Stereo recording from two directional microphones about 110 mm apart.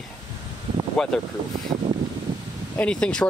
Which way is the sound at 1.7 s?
35° right (ahead or behind).